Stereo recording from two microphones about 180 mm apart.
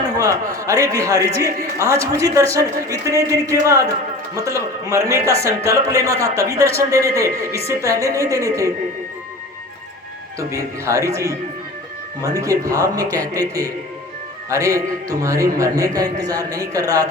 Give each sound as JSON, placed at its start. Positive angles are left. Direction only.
{"t": 0.2, "sound": "speech", "side_deg": -15}
{"t": 10.5, "sound": "speech", "side_deg": -15}
{"t": 12.4, "sound": "a man's voice", "side_deg": -20}